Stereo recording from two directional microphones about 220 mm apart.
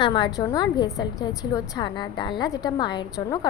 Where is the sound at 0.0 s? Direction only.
20° left (ahead or behind).